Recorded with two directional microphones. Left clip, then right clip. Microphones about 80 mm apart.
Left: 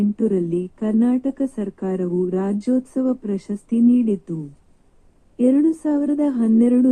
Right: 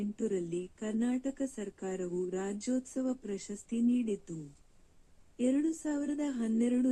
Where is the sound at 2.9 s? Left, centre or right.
Left.